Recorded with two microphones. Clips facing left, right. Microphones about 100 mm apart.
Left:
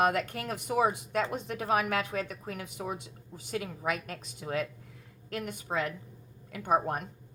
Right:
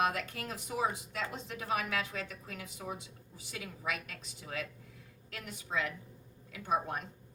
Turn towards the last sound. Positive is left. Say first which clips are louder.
# left 5 dB
turn(degrees=50)  # may be behind; listen again after turning